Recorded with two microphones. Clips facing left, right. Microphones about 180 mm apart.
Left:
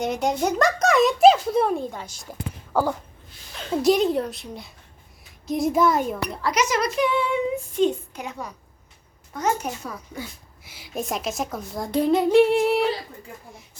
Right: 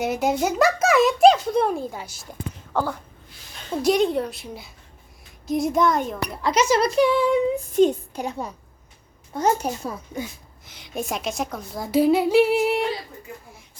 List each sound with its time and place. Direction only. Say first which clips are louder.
0.0 s a woman's voice: right 1 dB; 5° right (ahead or behind)
2.7 s a sound: left 2 dB; 10° left (ahead or behind)
3.8 s a woman's voice: even; centre (ahead or behind)
6.4 s speech: right 4 dB; 30° right (ahead or behind)
10.6 s a woman's voice: even; 5° left (ahead or behind)